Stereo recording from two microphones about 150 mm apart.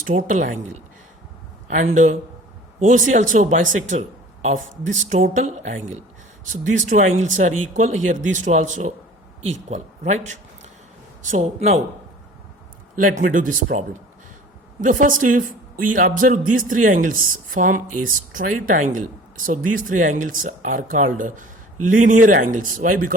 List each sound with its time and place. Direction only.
0.1 s speech: 60° right (ahead or behind)
1.7 s speech: 55° right (ahead or behind)
5.4 s speech: 50° right (ahead or behind)
11.2 s speech: 55° right (ahead or behind)
13.1 s speech: 65° right (ahead or behind)